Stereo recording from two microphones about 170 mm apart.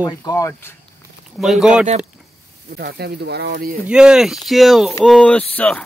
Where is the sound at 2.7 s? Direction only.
70° right (ahead or behind).